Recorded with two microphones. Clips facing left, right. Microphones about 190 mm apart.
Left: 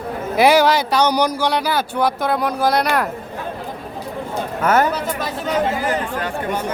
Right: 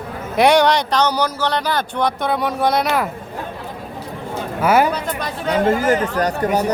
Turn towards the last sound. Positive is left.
turn(degrees=-40)  # may be behind; listen again after turning